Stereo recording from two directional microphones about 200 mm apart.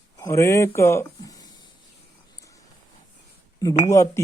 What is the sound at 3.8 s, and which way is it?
Speech, 15° left (ahead or behind).